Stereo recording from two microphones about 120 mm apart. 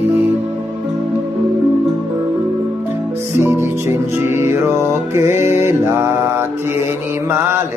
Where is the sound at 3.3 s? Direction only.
20° right (ahead or behind).